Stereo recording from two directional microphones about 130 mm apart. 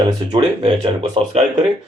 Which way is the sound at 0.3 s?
35° right (ahead or behind).